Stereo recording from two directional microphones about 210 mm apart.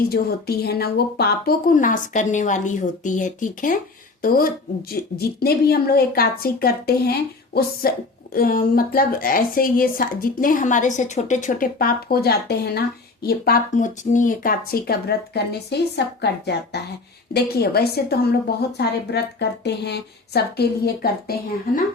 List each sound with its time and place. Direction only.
0.1 s a woman's voice: 50° left (ahead or behind)